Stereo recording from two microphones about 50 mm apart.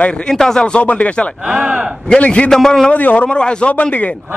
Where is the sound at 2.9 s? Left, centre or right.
Left.